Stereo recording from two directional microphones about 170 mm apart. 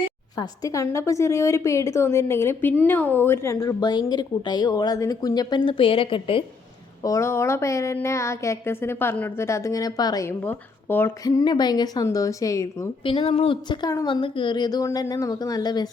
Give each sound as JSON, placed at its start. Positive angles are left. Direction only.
{"t": 0.3, "sound": "a woman's voice", "side_deg": 20}
{"t": 7.0, "sound": "a woman's voice", "side_deg": 20}
{"t": 13.1, "sound": "speech", "side_deg": 35}